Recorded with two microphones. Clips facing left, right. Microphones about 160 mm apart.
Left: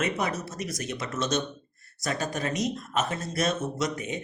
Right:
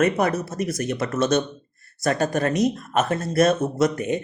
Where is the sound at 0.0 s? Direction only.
55° right (ahead or behind).